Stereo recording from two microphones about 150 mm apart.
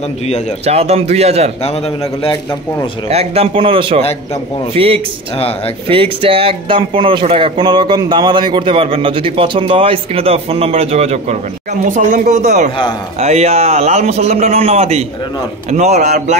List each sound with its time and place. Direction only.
0.7 s a man's voice: 45° right (ahead or behind)
3.1 s speech: 40° right (ahead or behind)
11.9 s speech: 65° right (ahead or behind)
13.2 s a man's voice: 45° right (ahead or behind)